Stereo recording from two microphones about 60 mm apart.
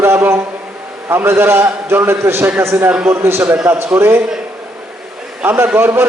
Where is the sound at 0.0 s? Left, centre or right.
Right.